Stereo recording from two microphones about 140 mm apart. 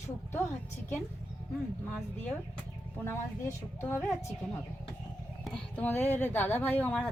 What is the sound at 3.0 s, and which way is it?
Speech, 15° left (ahead or behind).